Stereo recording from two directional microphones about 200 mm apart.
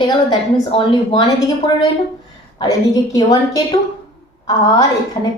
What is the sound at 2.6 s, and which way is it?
A woman's voice, 20° left (ahead or behind).